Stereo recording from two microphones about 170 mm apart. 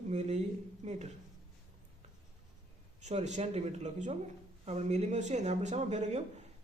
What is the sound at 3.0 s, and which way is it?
A man's voice, 45° right (ahead or behind).